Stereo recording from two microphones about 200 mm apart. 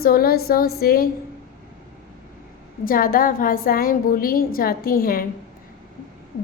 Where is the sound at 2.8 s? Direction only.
45° left (ahead or behind).